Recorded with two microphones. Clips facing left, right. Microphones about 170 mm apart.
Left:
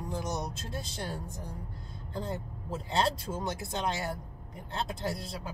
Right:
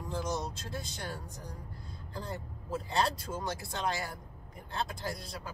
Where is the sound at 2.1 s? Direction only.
25° left (ahead or behind).